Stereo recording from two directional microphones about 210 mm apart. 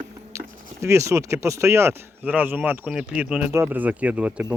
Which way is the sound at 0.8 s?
15° right (ahead or behind).